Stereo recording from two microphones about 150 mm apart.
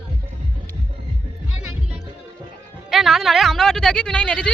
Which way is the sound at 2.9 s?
Centre (ahead or behind).